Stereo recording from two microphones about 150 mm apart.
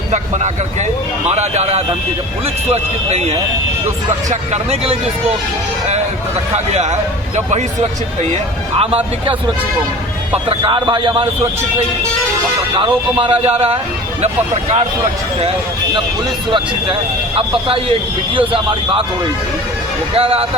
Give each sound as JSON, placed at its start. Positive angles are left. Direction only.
{"t": 0.1, "sound": "speech", "side_deg": -50}
{"t": 6.7, "sound": "speech", "side_deg": -50}
{"t": 10.3, "sound": "speech", "side_deg": -35}
{"t": 12.7, "sound": "speech", "side_deg": -35}
{"t": 16.5, "sound": "speech", "side_deg": -35}
{"t": 20.1, "sound": "speech", "side_deg": -40}